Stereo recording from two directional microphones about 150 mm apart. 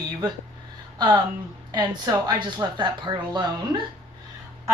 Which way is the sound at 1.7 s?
25° right (ahead or behind).